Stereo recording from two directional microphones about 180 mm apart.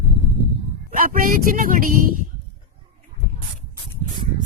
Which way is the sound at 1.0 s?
50° right (ahead or behind).